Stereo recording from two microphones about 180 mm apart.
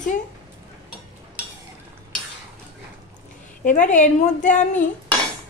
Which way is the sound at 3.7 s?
45° left (ahead or behind).